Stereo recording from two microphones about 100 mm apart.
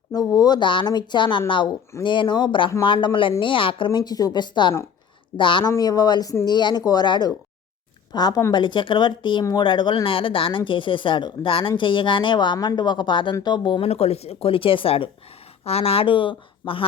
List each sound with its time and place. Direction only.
0.1 s speech: 40° left (ahead or behind)
5.7 s speech: 40° left (ahead or behind)
8.5 s speech: 55° left (ahead or behind)
13.8 s speech: 90° left; by 15.1 s 65° left (ahead or behind)
15.6 s speech: 85° left; by 16.8 s 60° left (ahead or behind)